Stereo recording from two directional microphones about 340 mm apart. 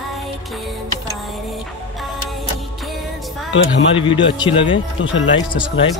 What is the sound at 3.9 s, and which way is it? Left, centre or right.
Speech, centre.